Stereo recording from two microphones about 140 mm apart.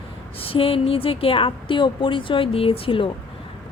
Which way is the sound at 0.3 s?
40° left (ahead or behind).